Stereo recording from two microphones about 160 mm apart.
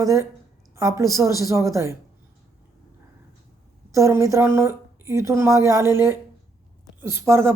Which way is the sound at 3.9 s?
20° right (ahead or behind).